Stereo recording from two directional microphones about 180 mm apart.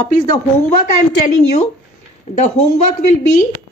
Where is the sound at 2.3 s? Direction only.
40° left (ahead or behind).